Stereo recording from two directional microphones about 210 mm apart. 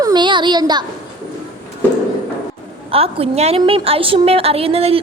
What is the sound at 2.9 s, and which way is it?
A woman's voice, 30° right (ahead or behind).